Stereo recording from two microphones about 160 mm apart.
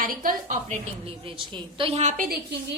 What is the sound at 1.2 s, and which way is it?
A woman's voice, 35° right (ahead or behind).